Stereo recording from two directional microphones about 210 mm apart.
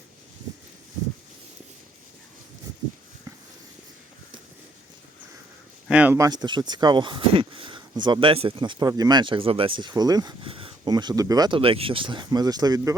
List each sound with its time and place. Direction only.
5.9 s speech: 5° right (ahead or behind)